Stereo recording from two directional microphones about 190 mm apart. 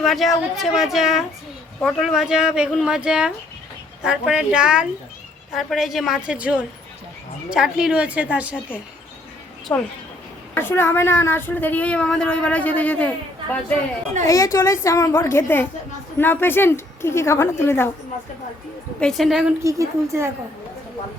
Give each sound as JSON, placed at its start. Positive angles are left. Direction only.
{"t": 0.0, "sound": "a woman's voice", "side_deg": 0}
{"t": 9.7, "sound": "speech", "side_deg": 15}
{"t": 18.9, "sound": "speech", "side_deg": 5}
{"t": 19.6, "sound": "a woman's voice", "side_deg": -15}